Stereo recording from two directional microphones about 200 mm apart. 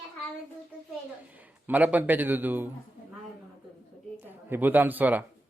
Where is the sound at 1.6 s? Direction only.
10° right (ahead or behind).